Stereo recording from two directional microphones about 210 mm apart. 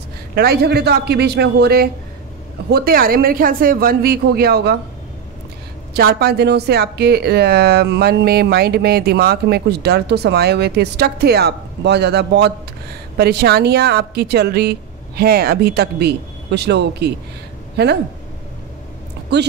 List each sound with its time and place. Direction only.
0.3 s speech: 50° right (ahead or behind)
5.9 s speech: 50° right (ahead or behind)
19.3 s speech: 50° right (ahead or behind)